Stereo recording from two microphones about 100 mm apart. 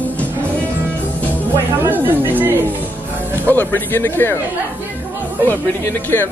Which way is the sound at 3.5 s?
20° left (ahead or behind).